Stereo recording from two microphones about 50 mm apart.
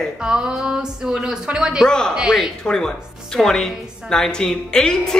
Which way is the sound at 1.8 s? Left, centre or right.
Centre.